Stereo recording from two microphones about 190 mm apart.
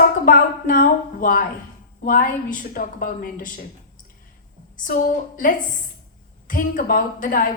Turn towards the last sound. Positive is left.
turn(degrees=45)  # may be behind; listen again after turning